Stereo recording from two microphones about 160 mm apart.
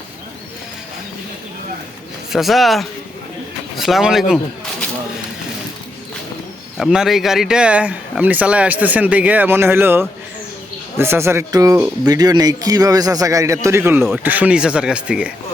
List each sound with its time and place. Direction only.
2.3 s speech: centre (ahead or behind)
6.7 s a man's voice: centre (ahead or behind)